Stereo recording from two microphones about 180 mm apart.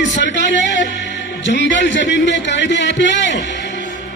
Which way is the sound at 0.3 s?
90° left.